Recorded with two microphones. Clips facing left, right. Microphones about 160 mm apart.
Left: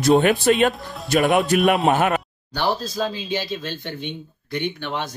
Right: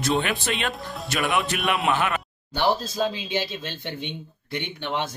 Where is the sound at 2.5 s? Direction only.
20° right (ahead or behind).